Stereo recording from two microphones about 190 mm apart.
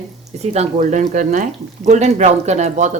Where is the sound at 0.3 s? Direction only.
35° right (ahead or behind).